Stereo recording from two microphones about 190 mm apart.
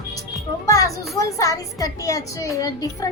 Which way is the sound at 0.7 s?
15° left (ahead or behind).